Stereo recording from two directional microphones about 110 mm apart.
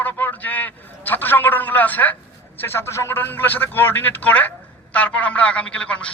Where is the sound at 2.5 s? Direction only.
20° left (ahead or behind).